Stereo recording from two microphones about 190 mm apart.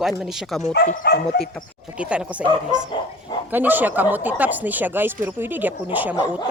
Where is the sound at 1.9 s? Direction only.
5° right (ahead or behind).